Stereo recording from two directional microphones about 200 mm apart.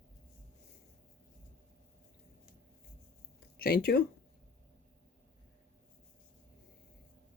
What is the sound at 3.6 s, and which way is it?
Speech, 50° left (ahead or behind).